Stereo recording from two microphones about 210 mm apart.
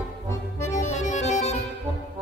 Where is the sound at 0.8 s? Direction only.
35° left (ahead or behind).